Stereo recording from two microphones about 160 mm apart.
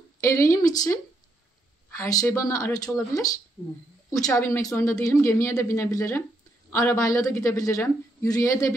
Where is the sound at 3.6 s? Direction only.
5° right (ahead or behind).